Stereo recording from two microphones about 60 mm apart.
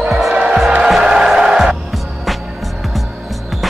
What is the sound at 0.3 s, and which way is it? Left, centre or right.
Music, centre.